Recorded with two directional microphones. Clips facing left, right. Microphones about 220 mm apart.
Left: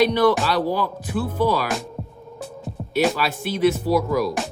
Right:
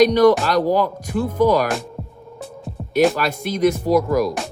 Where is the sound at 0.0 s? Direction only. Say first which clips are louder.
Right 5 dB; 45° right (ahead or behind).